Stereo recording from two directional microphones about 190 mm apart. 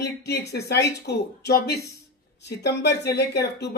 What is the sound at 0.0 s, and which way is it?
Speech, 60° left (ahead or behind).